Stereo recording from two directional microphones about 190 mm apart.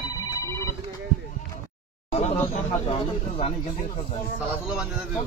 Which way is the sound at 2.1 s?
35° left (ahead or behind).